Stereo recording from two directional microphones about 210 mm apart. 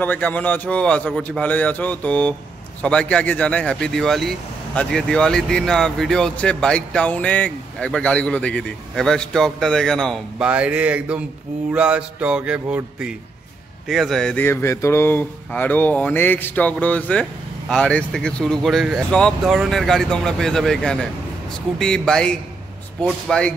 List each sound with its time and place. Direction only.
0.0 s speech: 5° left (ahead or behind)